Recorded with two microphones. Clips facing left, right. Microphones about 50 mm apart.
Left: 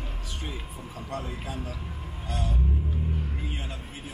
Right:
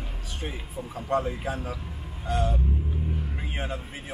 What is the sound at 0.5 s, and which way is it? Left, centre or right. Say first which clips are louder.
Speech: right 3 dB; centre.